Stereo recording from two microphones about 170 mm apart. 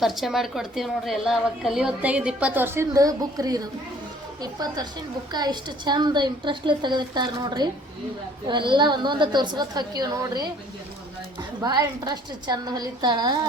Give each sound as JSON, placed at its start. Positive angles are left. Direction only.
{"t": 0.0, "sound": "a woman's voice", "side_deg": 0}
{"t": 11.6, "sound": "a woman's voice", "side_deg": -25}